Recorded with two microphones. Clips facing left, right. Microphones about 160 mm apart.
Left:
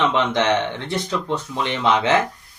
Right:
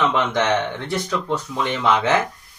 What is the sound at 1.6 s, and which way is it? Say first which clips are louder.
Speech: even; 20° left (ahead or behind).